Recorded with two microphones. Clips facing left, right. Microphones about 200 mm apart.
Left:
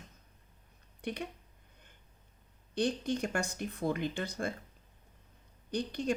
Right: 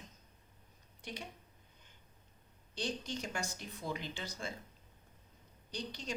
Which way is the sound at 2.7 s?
55° left (ahead or behind).